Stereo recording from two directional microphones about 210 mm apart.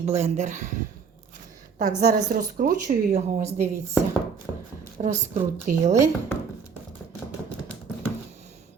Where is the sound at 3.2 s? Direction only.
30° right (ahead or behind).